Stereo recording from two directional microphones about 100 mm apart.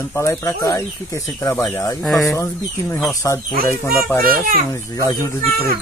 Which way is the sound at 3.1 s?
30° left (ahead or behind).